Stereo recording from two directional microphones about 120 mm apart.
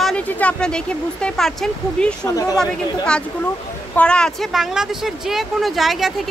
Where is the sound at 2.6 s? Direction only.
5° left (ahead or behind).